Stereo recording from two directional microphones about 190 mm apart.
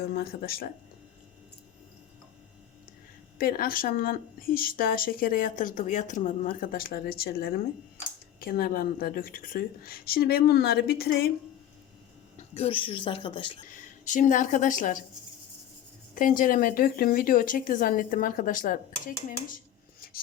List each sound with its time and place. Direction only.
0.1 s speech: 50° left (ahead or behind)
3.3 s speech: 50° left (ahead or behind)
12.5 s speech: 30° left (ahead or behind)
13.7 s speech: 40° left (ahead or behind)
16.1 s speech: 45° left (ahead or behind)